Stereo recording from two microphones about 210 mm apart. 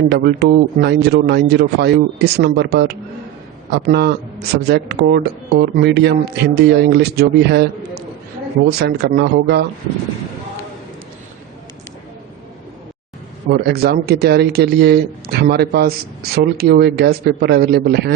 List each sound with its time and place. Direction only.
0.1 s speech: 50° right (ahead or behind)
13.5 s speech: 50° right (ahead or behind)